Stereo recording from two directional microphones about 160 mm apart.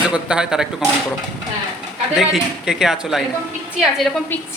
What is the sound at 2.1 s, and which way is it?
Speech, 5° right (ahead or behind).